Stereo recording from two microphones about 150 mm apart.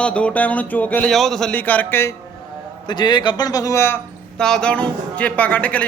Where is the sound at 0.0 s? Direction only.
10° left (ahead or behind).